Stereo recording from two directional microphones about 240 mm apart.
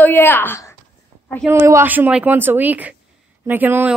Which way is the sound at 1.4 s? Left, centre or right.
Centre.